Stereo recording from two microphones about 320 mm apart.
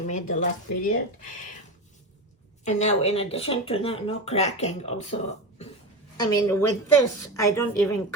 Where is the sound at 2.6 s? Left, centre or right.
Left.